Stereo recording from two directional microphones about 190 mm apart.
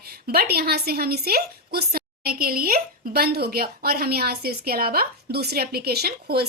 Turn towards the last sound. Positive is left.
turn(degrees=-55)  # may be behind; listen again after turning